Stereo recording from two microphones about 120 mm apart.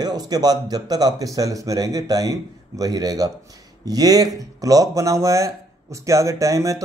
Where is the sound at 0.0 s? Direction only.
35° right (ahead or behind).